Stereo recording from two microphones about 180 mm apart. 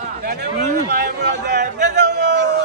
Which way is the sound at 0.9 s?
70° right (ahead or behind).